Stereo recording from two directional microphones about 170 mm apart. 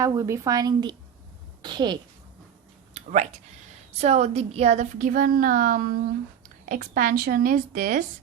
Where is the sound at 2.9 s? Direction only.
45° right (ahead or behind).